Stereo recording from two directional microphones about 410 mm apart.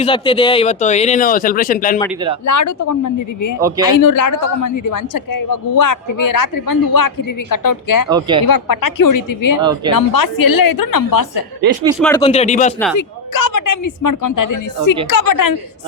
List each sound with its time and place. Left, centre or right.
0.0 s speech: centre
2.5 s a woman's voice: left
3.6 s speech: centre
3.9 s a woman's voice: left
8.1 s speech: centre
8.4 s a woman's voice: left
9.6 s speech: centre
9.9 s a woman's voice: left
11.9 s speech: centre
12.2 s speech: centre
13.0 s a woman's voice: left